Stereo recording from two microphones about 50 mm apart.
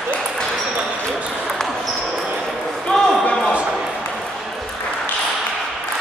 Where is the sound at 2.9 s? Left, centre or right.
Centre.